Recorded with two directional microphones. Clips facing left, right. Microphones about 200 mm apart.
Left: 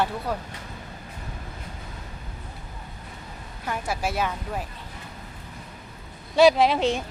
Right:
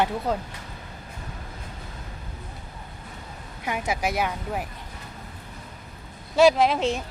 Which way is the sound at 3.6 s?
15° right (ahead or behind).